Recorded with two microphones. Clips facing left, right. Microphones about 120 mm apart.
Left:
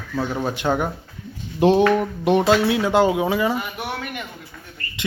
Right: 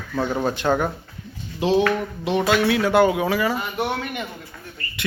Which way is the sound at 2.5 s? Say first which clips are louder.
Left 1 dB; 30° left (ahead or behind).